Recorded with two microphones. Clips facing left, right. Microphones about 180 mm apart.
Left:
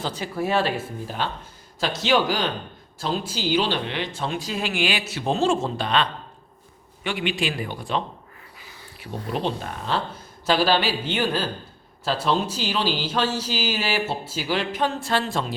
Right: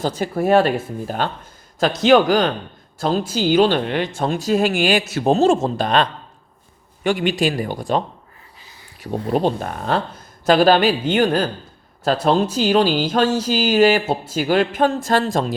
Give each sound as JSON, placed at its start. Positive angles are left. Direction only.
{"t": 0.0, "sound": "speech", "side_deg": -45}